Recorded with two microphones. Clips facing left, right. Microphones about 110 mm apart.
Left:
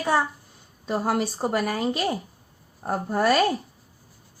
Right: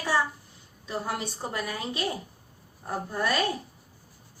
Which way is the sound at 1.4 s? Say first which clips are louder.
Left 8 dB; 65° left (ahead or behind).